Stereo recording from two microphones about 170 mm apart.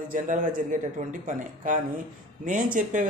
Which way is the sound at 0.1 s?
50° right (ahead or behind).